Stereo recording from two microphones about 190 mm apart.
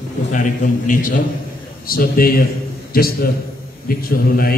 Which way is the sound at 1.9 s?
50° left (ahead or behind).